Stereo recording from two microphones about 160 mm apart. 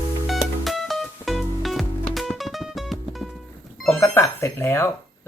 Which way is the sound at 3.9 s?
15° left (ahead or behind).